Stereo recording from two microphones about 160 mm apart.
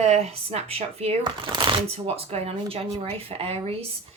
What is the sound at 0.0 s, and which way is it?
Speech, 40° right (ahead or behind).